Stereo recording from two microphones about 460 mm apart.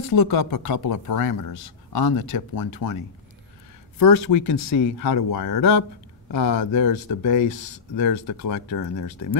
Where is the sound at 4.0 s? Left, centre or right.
Left.